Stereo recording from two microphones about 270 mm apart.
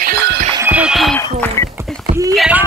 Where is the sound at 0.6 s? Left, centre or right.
Centre.